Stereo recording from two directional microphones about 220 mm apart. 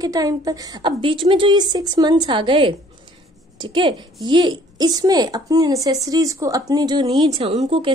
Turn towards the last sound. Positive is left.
turn(degrees=-25)  # may be behind; listen again after turning